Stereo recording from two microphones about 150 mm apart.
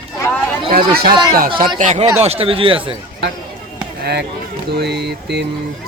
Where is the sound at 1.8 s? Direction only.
50° right (ahead or behind).